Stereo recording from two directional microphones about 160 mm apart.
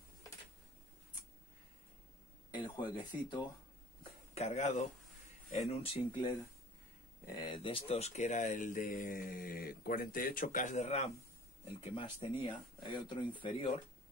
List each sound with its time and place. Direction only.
2.5 s a sound: 30° left (ahead or behind)
3.0 s speech: 30° left (ahead or behind)
4.3 s speech: 40° left (ahead or behind)
7.2 s speech: 30° left (ahead or behind); by 11.1 s 45° left (ahead or behind)
11.8 s speech: 35° left (ahead or behind)